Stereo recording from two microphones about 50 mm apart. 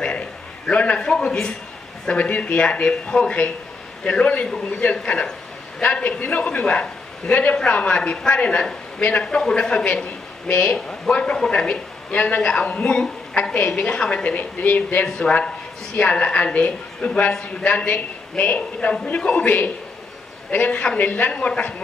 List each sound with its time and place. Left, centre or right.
0.0 s a sound: left
2.0 s a man's voice: left
4.9 s speech: centre
5.8 s a man's voice: left
15.0 s a man's voice: centre
17.6 s a man's voice: left